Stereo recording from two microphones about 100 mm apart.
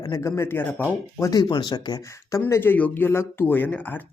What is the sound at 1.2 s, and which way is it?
Speech, 40° left (ahead or behind).